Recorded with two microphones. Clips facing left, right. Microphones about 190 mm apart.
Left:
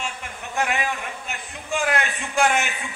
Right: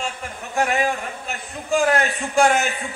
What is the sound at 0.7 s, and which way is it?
Speech, 35° right (ahead or behind).